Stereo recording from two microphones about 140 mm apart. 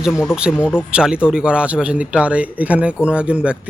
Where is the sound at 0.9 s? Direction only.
5° right (ahead or behind).